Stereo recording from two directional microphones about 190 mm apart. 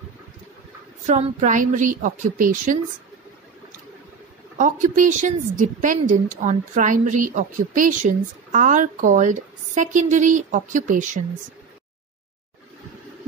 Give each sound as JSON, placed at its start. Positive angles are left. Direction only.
{"t": 1.0, "sound": "a woman's voice", "side_deg": -40}
{"t": 4.6, "sound": "a woman's voice", "side_deg": -40}